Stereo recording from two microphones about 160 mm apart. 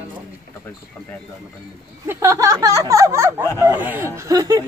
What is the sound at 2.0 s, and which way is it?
Speech, 20° right (ahead or behind).